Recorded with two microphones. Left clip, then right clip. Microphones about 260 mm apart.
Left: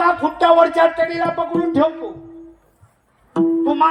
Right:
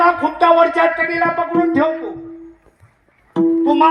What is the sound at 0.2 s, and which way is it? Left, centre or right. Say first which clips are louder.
Music: right 1 dB; centre.